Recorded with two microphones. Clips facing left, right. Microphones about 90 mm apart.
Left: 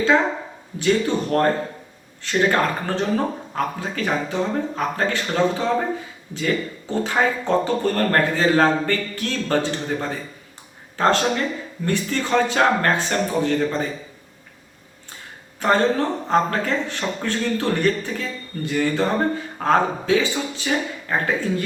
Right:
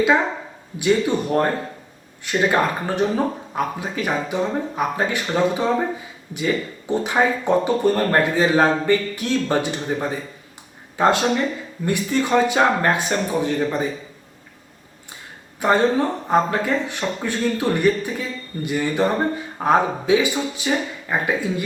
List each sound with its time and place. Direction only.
0.8 s speech: 15° right (ahead or behind)
15.6 s speech: 15° right (ahead or behind)